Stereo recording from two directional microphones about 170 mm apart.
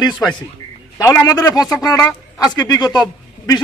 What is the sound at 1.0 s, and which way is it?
A man's voice, 20° left (ahead or behind).